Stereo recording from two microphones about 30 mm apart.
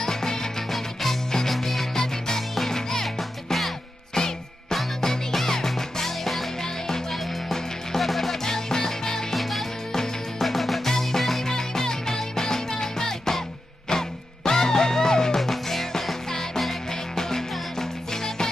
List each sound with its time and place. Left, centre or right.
0.0 s music: centre
1.5 s music: centre
2.0 s music: centre
8.0 s music: centre
8.5 s music: centre
9.3 s music: centre